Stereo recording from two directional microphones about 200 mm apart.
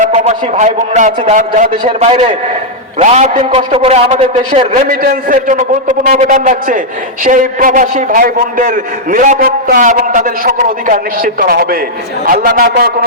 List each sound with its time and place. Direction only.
0.0 s a man's voice: 35° right (ahead or behind)
1.8 s a man's voice: 30° right (ahead or behind)
4.7 s a man's voice: 40° right (ahead or behind)